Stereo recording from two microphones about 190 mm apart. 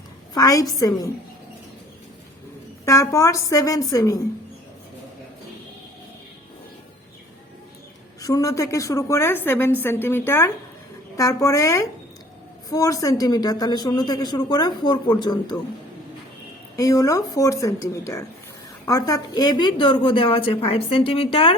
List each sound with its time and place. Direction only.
0.3 s speech: 20° left (ahead or behind)
2.8 s a woman's voice: 15° left (ahead or behind)
8.2 s a woman's voice: 20° left (ahead or behind)
16.7 s a woman's voice: 20° left (ahead or behind)